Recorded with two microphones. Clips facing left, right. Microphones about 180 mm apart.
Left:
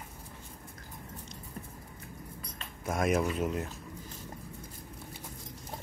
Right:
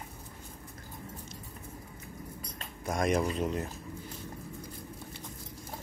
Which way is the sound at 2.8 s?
5° left (ahead or behind).